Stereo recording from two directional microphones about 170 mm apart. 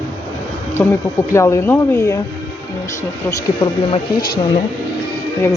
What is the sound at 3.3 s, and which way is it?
Speech, 30° left (ahead or behind).